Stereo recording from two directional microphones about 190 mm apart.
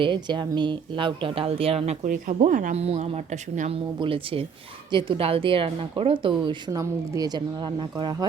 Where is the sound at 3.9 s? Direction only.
30° right (ahead or behind).